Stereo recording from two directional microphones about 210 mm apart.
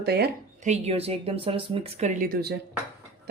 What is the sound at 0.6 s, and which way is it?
Speech, 35° right (ahead or behind).